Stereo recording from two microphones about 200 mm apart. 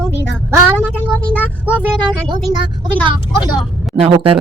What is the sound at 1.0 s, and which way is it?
Speech, 5° left (ahead or behind).